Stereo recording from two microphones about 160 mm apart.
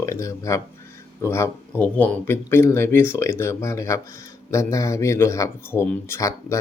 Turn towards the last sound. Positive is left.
turn(degrees=15)  # may be behind; listen again after turning